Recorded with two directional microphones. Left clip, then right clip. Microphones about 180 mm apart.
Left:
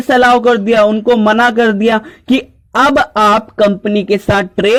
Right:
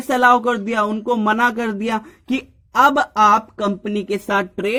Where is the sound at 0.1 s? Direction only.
25° left (ahead or behind).